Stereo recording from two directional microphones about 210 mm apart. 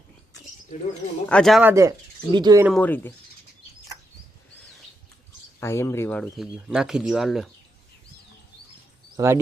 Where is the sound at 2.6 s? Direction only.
5° left (ahead or behind).